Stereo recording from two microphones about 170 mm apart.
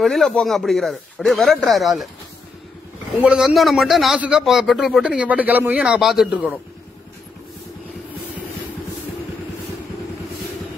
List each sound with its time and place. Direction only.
0.0 s a man's voice: centre (ahead or behind)
3.2 s a man's voice: 5° right (ahead or behind)